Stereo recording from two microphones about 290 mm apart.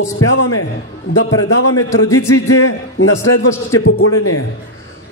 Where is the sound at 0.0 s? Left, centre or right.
Left.